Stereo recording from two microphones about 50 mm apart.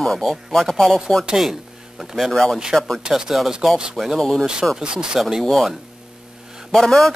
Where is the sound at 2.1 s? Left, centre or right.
Centre.